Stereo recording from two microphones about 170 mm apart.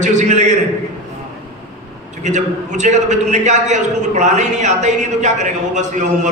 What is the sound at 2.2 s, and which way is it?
A man's voice, 45° right (ahead or behind).